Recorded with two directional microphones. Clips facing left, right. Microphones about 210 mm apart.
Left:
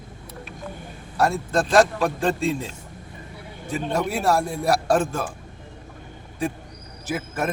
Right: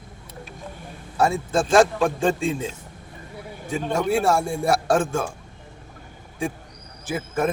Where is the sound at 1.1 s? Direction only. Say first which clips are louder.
Right 1 dB; centre (ahead or behind).